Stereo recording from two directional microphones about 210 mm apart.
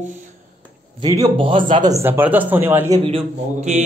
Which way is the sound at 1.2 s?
25° right (ahead or behind).